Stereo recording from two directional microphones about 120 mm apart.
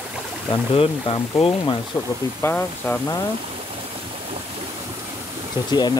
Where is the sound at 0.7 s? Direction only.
50° left (ahead or behind).